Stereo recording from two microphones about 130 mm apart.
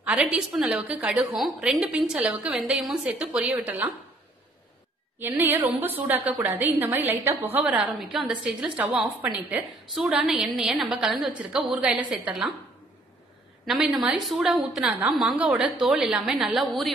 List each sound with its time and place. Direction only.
0.0 s a woman's voice: 10° right (ahead or behind)
5.2 s a woman's voice: 15° right (ahead or behind)
13.7 s a woman's voice: 5° right (ahead or behind)